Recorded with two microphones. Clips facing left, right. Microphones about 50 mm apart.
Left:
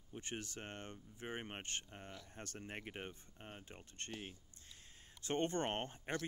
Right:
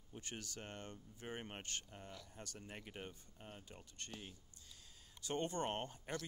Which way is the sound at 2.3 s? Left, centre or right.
Left.